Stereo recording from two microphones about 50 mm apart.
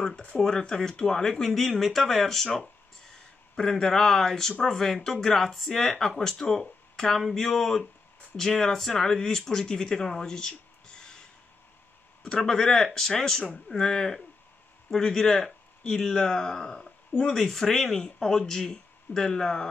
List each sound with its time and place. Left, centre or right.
0.0 s speech: centre